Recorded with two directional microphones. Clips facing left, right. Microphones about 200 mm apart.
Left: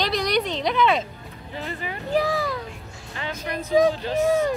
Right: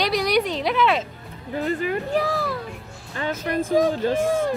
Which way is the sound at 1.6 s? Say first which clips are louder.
Right 8 dB; 45° right (ahead or behind).